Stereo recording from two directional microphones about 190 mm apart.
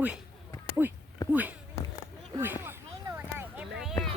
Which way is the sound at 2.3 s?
10° right (ahead or behind).